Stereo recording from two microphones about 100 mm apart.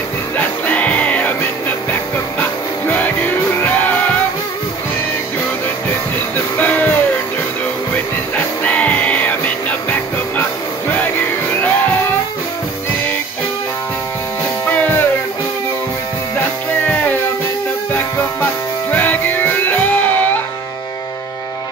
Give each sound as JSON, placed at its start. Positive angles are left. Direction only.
{"t": 0.4, "sound": "music", "side_deg": 15}
{"t": 2.9, "sound": "music", "side_deg": 20}
{"t": 6.5, "sound": "music", "side_deg": 15}
{"t": 8.6, "sound": "music", "side_deg": 15}
{"t": 14.7, "sound": "music", "side_deg": 20}
{"t": 16.8, "sound": "music", "side_deg": 15}